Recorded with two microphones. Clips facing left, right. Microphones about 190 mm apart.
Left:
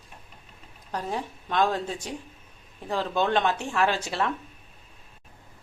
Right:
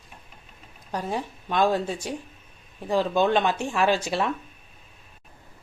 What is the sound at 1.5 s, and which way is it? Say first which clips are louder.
Speech: right 3 dB; 10° right (ahead or behind).